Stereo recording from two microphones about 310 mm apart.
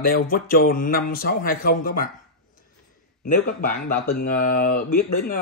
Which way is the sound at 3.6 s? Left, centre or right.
Left.